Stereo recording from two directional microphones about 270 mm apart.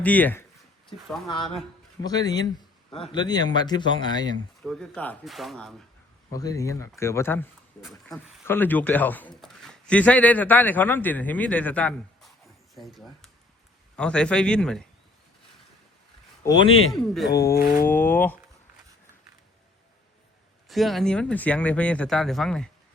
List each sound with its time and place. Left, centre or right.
0.0 s speech: centre
2.0 s speech: centre
4.6 s speech: centre
6.3 s speech: centre
16.4 s speech: centre
16.6 s a man's voice: left
16.9 s speech: centre
17.3 s speech: centre
17.6 s mantra: left
17.8 s speech: centre
20.7 s speech: centre